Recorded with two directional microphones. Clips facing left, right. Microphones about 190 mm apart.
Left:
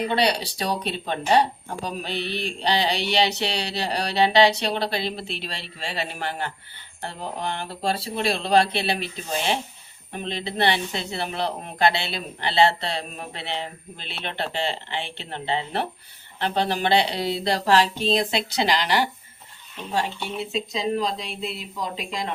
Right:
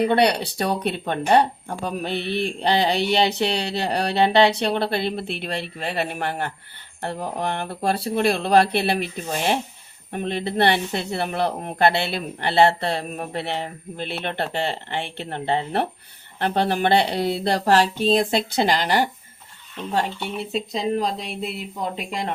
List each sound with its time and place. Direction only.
0.1 s speech: 55° right (ahead or behind)
10.1 s speech: 55° right (ahead or behind)
20.7 s speech: 55° right (ahead or behind)